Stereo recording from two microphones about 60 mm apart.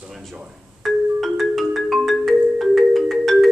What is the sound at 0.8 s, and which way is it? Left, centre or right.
Music, centre.